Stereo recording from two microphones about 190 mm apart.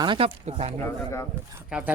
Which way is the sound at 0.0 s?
25° right (ahead or behind).